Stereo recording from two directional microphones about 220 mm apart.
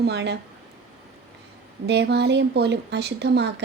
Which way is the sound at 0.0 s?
50° right (ahead or behind).